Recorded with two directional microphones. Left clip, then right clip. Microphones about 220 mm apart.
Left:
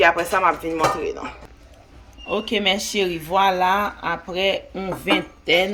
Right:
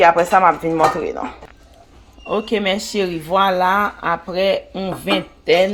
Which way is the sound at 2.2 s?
25° right (ahead or behind).